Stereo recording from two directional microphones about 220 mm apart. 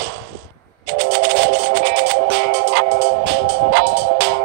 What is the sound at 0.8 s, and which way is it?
Music, 50° right (ahead or behind).